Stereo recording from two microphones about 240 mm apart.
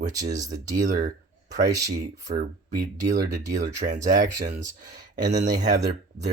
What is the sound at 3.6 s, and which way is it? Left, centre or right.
Speech, right.